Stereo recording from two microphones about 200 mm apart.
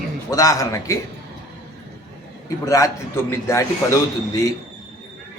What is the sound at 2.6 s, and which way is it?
A man's voice, 15° left (ahead or behind).